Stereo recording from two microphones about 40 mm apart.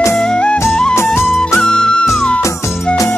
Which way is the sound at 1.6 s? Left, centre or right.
Centre.